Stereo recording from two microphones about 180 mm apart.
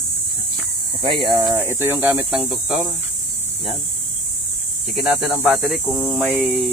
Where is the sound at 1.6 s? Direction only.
15° right (ahead or behind).